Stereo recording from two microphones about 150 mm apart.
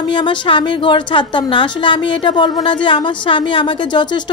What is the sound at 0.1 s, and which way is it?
A woman's voice, 35° left (ahead or behind).